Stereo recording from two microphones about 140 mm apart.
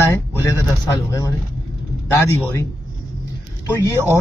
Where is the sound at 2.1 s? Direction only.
20° left (ahead or behind).